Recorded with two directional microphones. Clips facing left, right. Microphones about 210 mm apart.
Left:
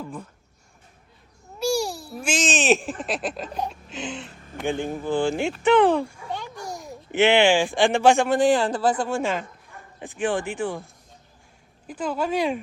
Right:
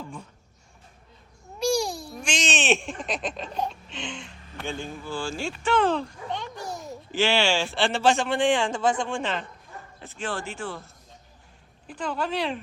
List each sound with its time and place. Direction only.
1.5 s babbling: 5° left (ahead or behind)
3.5 s laughter: 10° left (ahead or behind)
4.5 s speech: 15° left (ahead or behind)
4.9 s speech: 55° left (ahead or behind)
5.2 s speech: 20° left (ahead or behind)
5.6 s a sound: 15° left (ahead or behind)
7.2 s speech: 20° left (ahead or behind)
8.4 s speech: 40° left (ahead or behind)
9.0 s speech: 5° left (ahead or behind)